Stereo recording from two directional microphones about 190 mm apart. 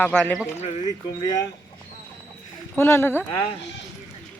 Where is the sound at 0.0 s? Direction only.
5° left (ahead or behind).